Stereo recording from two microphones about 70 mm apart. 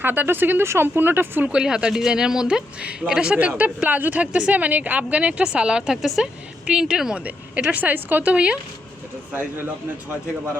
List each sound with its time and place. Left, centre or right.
0.0 s a woman's voice: right
1.5 s speech: centre
3.3 s a woman's voice: right
7.7 s a woman's voice: right